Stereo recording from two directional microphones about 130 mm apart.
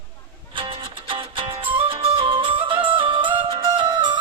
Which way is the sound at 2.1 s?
40° right (ahead or behind).